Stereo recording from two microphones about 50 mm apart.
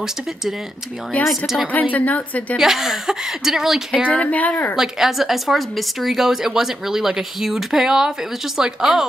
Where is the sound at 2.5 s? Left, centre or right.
Centre.